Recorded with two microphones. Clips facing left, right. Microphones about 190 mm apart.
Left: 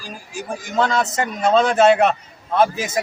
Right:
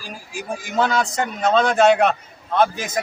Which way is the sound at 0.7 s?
5° right (ahead or behind).